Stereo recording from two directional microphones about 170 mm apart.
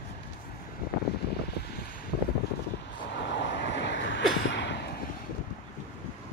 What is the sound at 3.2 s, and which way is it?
Vehicle, 90° left.